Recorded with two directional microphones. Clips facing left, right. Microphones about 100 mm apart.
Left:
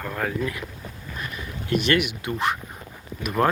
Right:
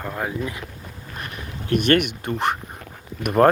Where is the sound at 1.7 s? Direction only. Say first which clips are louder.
Right 3 dB; 55° right (ahead or behind).